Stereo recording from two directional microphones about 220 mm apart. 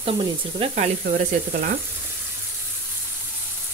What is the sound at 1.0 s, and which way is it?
Speech, 45° right (ahead or behind).